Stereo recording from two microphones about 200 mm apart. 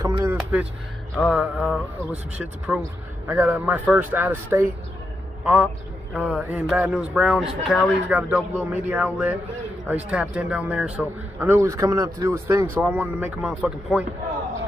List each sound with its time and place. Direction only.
0.0 s music: 15° right (ahead or behind)
1.2 s a man's voice: 5° right (ahead or behind)